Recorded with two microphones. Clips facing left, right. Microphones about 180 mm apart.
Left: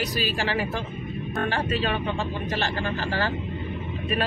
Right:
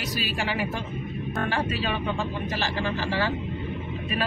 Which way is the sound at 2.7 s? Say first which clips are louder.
Even; 50° left (ahead or behind).